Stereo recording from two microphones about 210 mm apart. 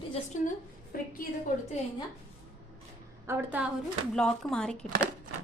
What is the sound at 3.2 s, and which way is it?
Speech, 10° right (ahead or behind).